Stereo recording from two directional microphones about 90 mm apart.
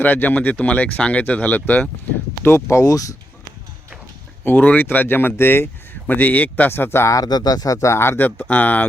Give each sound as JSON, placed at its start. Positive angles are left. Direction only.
{"t": 0.0, "sound": "speech", "side_deg": 20}
{"t": 2.4, "sound": "speech", "side_deg": 30}
{"t": 4.4, "sound": "speech", "side_deg": 15}
{"t": 7.1, "sound": "speech", "side_deg": 45}